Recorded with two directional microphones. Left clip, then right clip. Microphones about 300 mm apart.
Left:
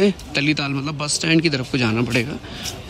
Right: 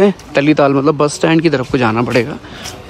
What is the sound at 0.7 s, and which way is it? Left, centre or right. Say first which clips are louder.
Speech: right 14 dB; left.